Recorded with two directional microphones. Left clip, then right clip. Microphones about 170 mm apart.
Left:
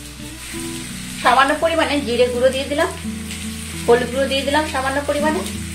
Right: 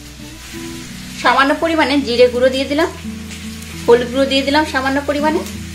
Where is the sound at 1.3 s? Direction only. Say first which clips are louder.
Right 1 dB; 45° right (ahead or behind).